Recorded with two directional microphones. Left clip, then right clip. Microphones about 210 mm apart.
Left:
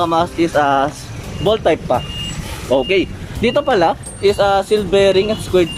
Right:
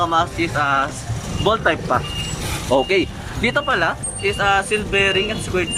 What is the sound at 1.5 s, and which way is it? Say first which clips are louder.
Speech: left 3 dB; 15° left (ahead or behind).